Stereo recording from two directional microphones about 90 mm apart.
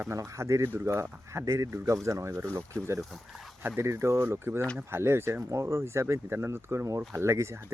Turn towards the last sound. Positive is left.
turn(degrees=-30)  # may be behind; listen again after turning